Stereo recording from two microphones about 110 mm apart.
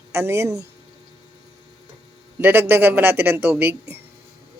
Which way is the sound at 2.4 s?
20° right (ahead or behind).